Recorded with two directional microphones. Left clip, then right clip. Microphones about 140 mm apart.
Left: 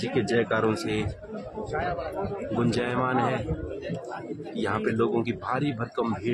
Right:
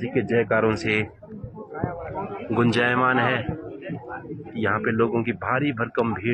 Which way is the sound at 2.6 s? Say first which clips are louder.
Right 7 dB; 30° right (ahead or behind).